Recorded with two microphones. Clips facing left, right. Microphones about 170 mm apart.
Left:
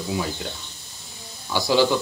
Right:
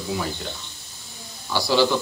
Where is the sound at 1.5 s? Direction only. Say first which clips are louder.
Left 1 dB; 15° left (ahead or behind).